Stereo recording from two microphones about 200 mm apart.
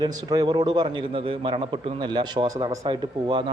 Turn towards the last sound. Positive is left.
turn(degrees=-25)  # may be behind; listen again after turning